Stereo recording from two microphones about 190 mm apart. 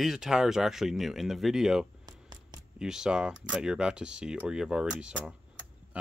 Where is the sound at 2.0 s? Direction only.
20° right (ahead or behind).